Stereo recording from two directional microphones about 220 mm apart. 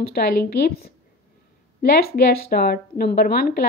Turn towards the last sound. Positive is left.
turn(degrees=45)  # may be behind; listen again after turning